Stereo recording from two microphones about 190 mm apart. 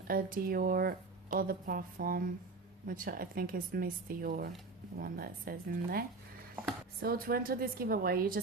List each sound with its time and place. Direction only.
0.1 s speech: 50° right (ahead or behind)